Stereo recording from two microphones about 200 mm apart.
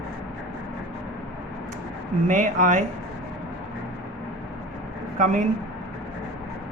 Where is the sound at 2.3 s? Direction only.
40° right (ahead or behind).